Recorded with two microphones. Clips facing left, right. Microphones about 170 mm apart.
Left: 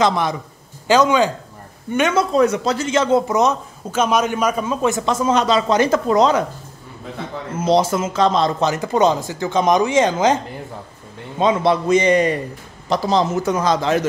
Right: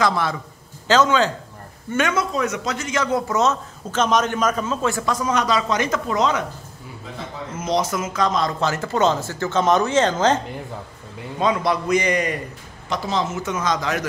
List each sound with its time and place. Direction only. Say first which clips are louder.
0.0 s speech: left 3 dB; 20° left (ahead or behind)
2.1 s speech: left 7 dB; 30° left (ahead or behind)
7.5 s speech: left 6 dB; 30° left (ahead or behind); by 10.4 s 10° left (ahead or behind)
11.3 s a man's voice: left 4 dB; 25° left (ahead or behind)